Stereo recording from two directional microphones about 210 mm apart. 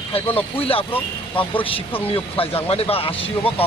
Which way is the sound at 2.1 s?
25° left (ahead or behind).